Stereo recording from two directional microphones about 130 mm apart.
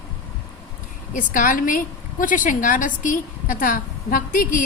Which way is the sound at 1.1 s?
90° left.